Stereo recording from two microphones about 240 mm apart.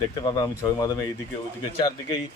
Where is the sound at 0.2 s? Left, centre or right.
Centre.